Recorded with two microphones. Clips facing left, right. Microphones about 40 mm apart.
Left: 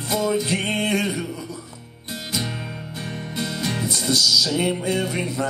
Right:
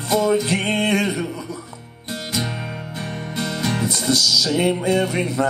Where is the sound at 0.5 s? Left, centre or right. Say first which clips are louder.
Right 3 dB; right.